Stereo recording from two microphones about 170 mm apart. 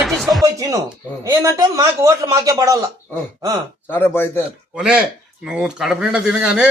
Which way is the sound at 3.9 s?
15° left (ahead or behind).